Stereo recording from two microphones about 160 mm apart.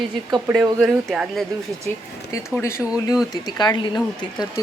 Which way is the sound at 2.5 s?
15° left (ahead or behind).